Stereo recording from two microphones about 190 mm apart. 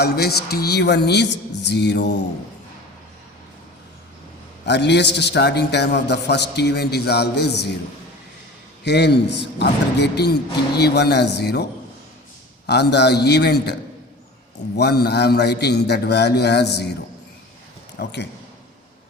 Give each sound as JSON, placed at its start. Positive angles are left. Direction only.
{"t": 0.0, "sound": "a man's voice", "side_deg": 55}
{"t": 4.6, "sound": "a man's voice", "side_deg": 65}
{"t": 8.8, "sound": "a man's voice", "side_deg": 60}
{"t": 14.8, "sound": "a man's voice", "side_deg": 60}
{"t": 18.0, "sound": "a man's voice", "side_deg": 65}